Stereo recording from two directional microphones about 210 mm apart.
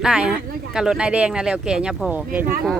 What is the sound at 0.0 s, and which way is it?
Speech, 5° right (ahead or behind).